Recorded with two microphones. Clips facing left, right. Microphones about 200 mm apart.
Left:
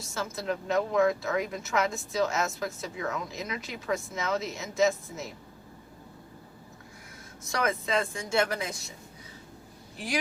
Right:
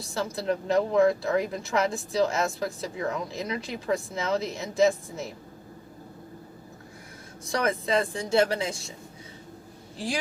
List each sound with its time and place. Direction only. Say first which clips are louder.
0.0 s speech: right 4 dB; 30° right (ahead or behind)
7.4 s speech: right 3 dB; 30° right (ahead or behind)